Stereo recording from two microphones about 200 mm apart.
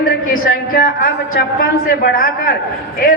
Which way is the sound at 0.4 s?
45° left (ahead or behind).